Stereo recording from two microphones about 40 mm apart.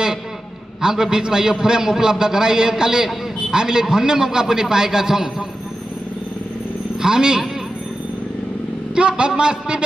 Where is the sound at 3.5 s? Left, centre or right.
Centre.